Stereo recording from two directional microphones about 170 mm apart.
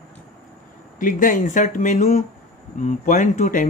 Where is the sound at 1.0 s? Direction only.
50° left (ahead or behind).